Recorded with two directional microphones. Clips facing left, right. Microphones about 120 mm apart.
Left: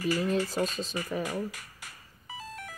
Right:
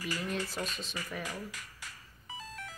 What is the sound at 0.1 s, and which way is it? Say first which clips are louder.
Speech: left 8 dB; 35° left (ahead or behind).